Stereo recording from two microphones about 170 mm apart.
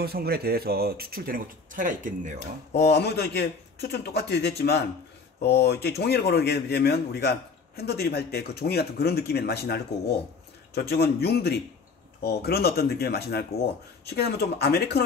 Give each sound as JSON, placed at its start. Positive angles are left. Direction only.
{"t": 0.0, "sound": "speech", "side_deg": -65}
{"t": 2.7, "sound": "speech", "side_deg": 75}